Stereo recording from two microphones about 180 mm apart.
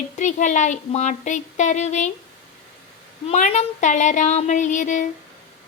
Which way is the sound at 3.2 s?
40° left (ahead or behind).